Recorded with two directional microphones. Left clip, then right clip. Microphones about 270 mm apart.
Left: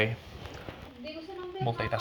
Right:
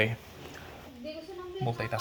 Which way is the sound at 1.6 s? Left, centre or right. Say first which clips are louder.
Left 2 dB; centre.